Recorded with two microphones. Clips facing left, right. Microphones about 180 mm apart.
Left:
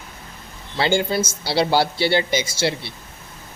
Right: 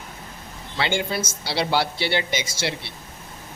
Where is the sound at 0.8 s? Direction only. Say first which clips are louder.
Left 5 dB; 35° left (ahead or behind).